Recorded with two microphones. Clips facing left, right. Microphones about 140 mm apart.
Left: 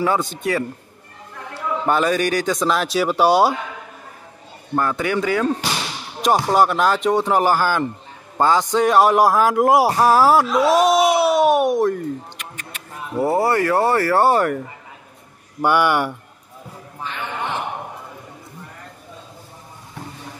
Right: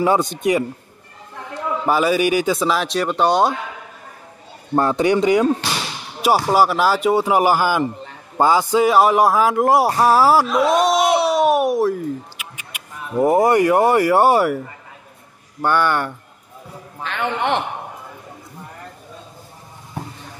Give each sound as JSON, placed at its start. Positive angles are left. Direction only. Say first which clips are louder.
{"t": 0.0, "sound": "speech", "louder": "right 3 dB", "side_deg": -20}
{"t": 1.5, "sound": "a man's voice", "louder": "right 1 dB", "side_deg": -5}
{"t": 4.7, "sound": "a man's voice", "louder": "right 4 dB", "side_deg": -25}
{"t": 6.2, "sound": "speech", "louder": "right 1 dB", "side_deg": -5}
{"t": 15.6, "sound": "speech", "louder": "left 1 dB", "side_deg": 10}
{"t": 17.0, "sound": "speech", "louder": "right 6 dB", "side_deg": -80}